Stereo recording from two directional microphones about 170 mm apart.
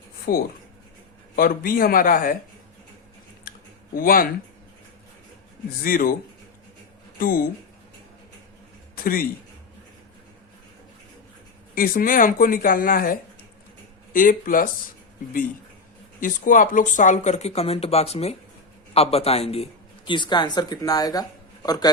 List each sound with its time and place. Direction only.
0.3 s speech: 60° left (ahead or behind)
3.5 s a sound: 60° left (ahead or behind)
3.9 s speech: 55° left (ahead or behind)
5.8 s speech: 55° left (ahead or behind)
7.2 s speech: 55° left (ahead or behind)
11.7 s speech: 55° left (ahead or behind)
16.2 s a man's voice: 50° left (ahead or behind); by 21.9 s 25° left (ahead or behind)